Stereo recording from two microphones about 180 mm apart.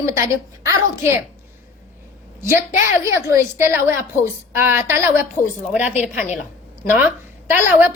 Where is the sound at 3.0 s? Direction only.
15° right (ahead or behind).